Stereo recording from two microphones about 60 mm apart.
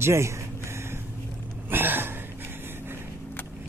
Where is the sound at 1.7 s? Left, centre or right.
Right.